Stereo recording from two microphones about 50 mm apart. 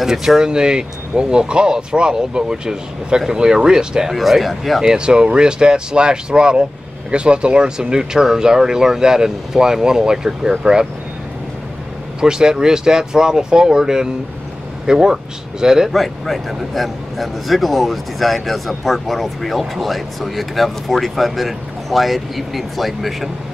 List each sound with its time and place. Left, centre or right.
0.0 s speech: centre
4.2 s speech: centre
4.8 s speech: centre
12.2 s speech: centre
15.9 s speech: centre